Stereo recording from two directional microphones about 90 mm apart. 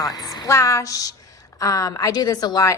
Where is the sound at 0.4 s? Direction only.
35° left (ahead or behind).